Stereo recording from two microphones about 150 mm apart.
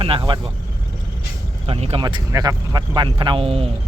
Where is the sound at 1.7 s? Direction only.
40° right (ahead or behind).